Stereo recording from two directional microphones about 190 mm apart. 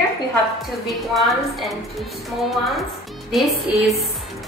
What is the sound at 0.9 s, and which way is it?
Speech, centre (ahead or behind).